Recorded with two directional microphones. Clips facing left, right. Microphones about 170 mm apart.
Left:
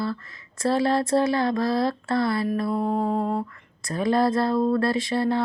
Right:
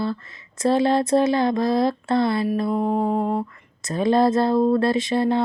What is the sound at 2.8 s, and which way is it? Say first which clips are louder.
Music: right 3 dB; 5° right (ahead or behind).